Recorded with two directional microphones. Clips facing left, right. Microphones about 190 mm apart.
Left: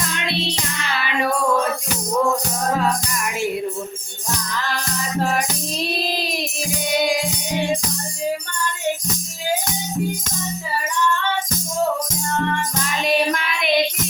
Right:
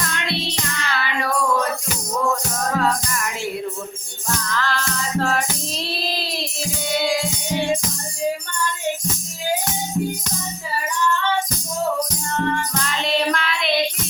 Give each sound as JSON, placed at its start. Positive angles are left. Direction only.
{"t": 0.0, "sound": "music", "side_deg": 20}
{"t": 4.4, "sound": "music", "side_deg": 15}
{"t": 12.8, "sound": "music", "side_deg": 15}